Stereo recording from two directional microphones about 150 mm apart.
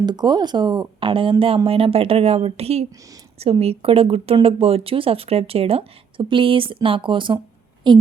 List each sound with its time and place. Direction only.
0.0 s speech: 30° right (ahead or behind)